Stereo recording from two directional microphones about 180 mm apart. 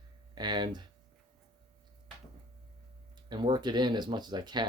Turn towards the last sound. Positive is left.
turn(degrees=-25)  # may be behind; listen again after turning